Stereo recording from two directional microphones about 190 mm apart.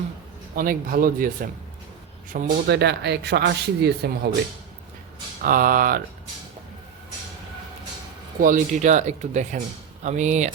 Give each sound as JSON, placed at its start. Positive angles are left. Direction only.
{"t": 0.5, "sound": "a man's voice", "side_deg": -45}
{"t": 2.3, "sound": "speech", "side_deg": -60}
{"t": 5.4, "sound": "a man's voice", "side_deg": -50}
{"t": 8.4, "sound": "speech", "side_deg": -45}